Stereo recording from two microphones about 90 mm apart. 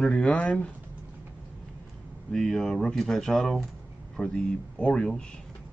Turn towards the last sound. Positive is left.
turn(degrees=10)  # may be behind; listen again after turning